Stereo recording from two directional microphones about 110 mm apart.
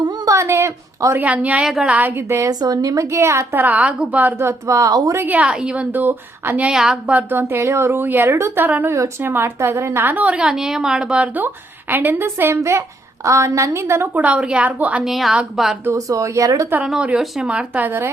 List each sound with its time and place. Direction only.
0.3 s speech: 25° right (ahead or behind)
1.2 s a woman's voice: 15° right (ahead or behind)
2.5 s a woman's voice: 35° right (ahead or behind)
5.2 s a woman's voice: 15° right (ahead or behind)
6.7 s a woman's voice: 5° right (ahead or behind)
15.1 s a woman's voice: centre (ahead or behind)
15.8 s a woman's voice: 30° right (ahead or behind)
16.8 s a woman's voice: 5° right (ahead or behind)